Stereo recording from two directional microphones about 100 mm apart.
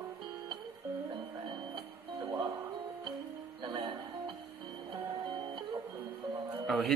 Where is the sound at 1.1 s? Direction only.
50° right (ahead or behind).